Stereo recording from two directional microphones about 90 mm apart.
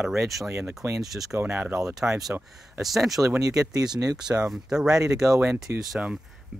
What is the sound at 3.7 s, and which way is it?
Speech, 45° right (ahead or behind).